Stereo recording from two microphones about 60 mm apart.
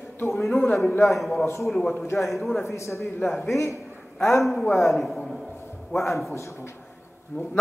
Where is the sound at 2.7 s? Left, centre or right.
Left.